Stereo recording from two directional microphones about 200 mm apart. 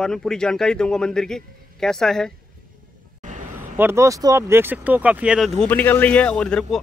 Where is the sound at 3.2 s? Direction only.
40° right (ahead or behind).